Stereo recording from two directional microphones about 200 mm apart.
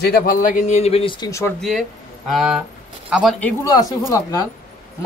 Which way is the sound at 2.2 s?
Centre (ahead or behind).